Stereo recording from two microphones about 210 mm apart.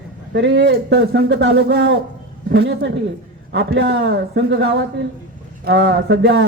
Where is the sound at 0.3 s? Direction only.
55° right (ahead or behind).